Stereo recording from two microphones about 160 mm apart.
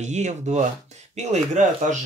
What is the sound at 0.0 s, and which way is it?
Speech, 45° right (ahead or behind).